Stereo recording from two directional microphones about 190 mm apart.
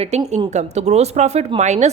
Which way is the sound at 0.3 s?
35° right (ahead or behind).